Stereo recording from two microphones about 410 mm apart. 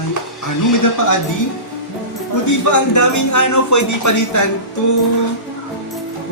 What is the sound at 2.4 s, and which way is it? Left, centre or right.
Speech, left.